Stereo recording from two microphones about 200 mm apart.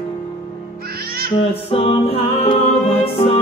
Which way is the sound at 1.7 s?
30° left (ahead or behind).